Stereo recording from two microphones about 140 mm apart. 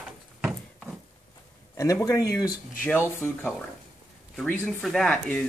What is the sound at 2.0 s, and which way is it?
Speech, 20° left (ahead or behind).